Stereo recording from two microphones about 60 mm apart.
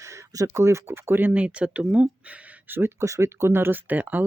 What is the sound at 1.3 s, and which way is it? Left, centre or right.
Speech, right.